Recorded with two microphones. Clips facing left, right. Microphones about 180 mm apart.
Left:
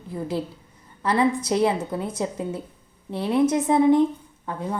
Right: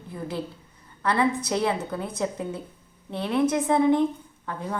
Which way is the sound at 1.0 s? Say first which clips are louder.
Left 2 dB; 20° left (ahead or behind).